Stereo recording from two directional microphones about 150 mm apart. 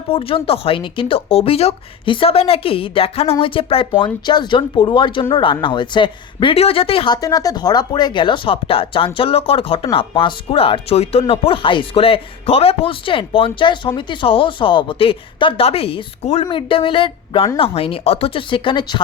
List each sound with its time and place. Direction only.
0.1 s speech: 40° left (ahead or behind)
7.2 s speech: 25° left (ahead or behind)